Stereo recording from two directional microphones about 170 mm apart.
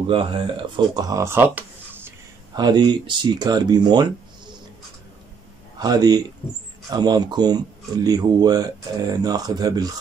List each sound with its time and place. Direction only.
0.0 s speech: 30° right (ahead or behind); by 1.6 s 10° right (ahead or behind)
2.5 s speech: 25° right (ahead or behind)
5.8 s speech: 20° right (ahead or behind)